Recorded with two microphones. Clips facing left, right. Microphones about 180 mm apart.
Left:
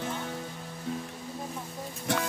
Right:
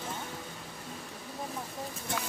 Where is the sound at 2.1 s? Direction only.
75° left (ahead or behind).